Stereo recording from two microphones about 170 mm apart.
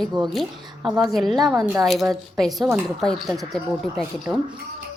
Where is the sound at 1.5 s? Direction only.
20° right (ahead or behind).